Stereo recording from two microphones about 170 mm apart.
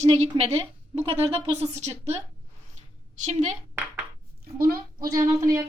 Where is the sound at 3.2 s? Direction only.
45° right (ahead or behind).